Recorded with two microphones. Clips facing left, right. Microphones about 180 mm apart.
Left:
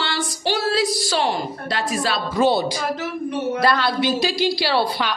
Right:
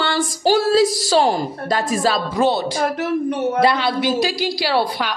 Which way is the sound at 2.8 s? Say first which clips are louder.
Right 5 dB; 60° right (ahead or behind).